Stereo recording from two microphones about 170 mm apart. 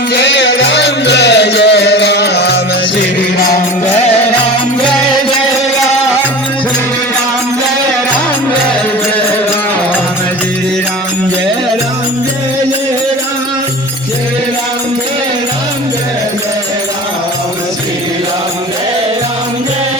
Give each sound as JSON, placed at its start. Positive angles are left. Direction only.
{"t": 0.1, "sound": "music", "side_deg": 90}